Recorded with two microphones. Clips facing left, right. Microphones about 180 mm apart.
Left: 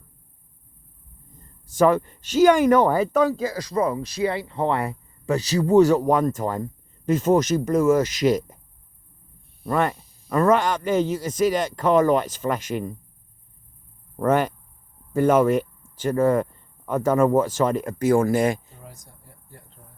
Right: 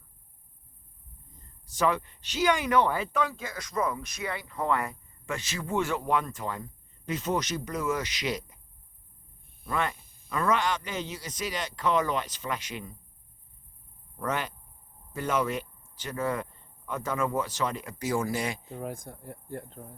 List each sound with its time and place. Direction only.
1.4 s speech: 50° left (ahead or behind)
9.6 s a man's voice: 45° left (ahead or behind)
14.2 s a man's voice: 45° left (ahead or behind)
18.7 s speech: 55° right (ahead or behind)